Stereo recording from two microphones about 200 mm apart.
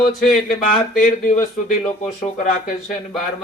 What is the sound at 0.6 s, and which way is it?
A man's voice, 40° left (ahead or behind).